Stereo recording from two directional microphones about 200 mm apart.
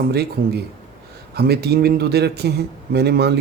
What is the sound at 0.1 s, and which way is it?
Speech, 55° right (ahead or behind).